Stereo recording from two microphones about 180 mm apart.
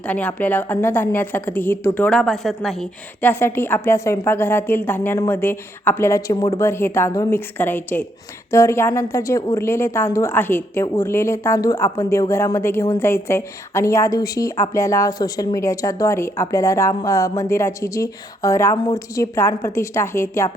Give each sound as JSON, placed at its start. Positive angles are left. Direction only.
{"t": 0.1, "sound": "a woman's voice", "side_deg": 10}